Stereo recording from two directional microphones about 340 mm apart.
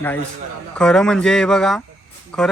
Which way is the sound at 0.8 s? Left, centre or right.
Centre.